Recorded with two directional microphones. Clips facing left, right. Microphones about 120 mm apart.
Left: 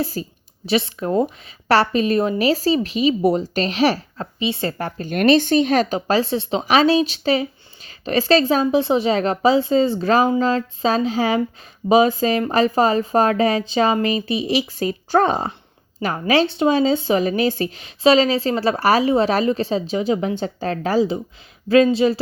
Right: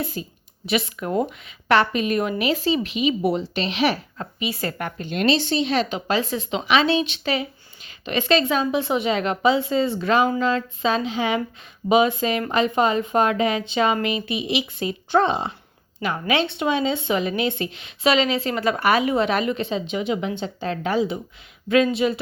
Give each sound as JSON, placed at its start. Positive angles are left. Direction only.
{"t": 0.0, "sound": "speech", "side_deg": 35}
{"t": 5.0, "sound": "speech", "side_deg": 55}